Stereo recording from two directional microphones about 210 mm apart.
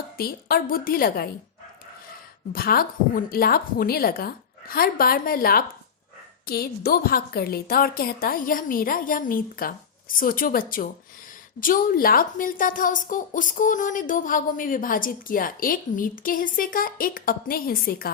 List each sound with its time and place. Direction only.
0.2 s a woman's voice: 45° left (ahead or behind)
2.5 s a woman's voice: 45° left (ahead or behind)